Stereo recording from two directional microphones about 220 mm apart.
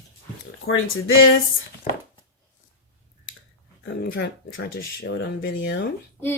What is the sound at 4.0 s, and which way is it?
A woman's voice, 45° left (ahead or behind).